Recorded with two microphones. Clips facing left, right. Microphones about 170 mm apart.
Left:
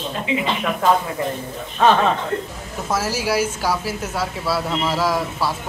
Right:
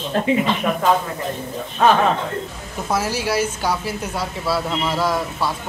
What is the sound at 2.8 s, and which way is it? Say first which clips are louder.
Speech: even; 5° left (ahead or behind).